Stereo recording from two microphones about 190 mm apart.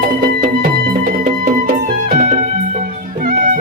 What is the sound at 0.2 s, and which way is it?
Music, 50° right (ahead or behind).